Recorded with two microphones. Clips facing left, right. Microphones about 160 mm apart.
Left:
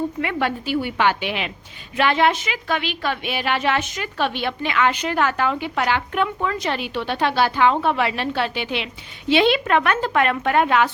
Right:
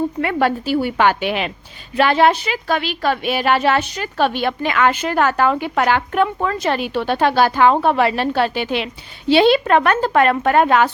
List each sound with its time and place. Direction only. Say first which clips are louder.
0.2 s a woman's voice: right 5 dB; 45° right (ahead or behind)